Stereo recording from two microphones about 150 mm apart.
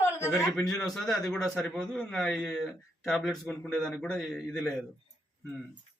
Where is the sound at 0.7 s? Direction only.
Centre (ahead or behind).